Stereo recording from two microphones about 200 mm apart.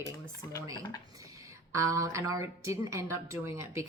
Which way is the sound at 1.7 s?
15° right (ahead or behind).